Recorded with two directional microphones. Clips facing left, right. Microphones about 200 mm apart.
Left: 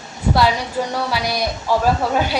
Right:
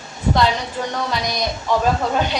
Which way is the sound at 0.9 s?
10° left (ahead or behind).